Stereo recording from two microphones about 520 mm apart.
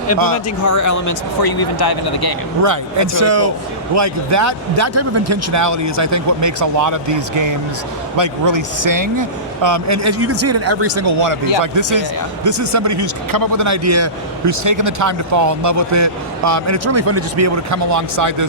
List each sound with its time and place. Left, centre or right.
0.6 s speech: left
2.6 s a man's voice: right